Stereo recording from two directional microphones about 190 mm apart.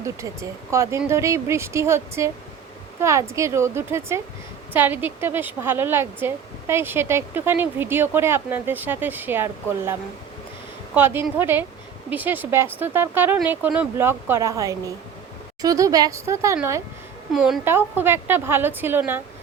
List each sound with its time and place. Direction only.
0.0 s speech: 15° right (ahead or behind)
17.3 s speech: centre (ahead or behind)
17.7 s speech: 10° right (ahead or behind)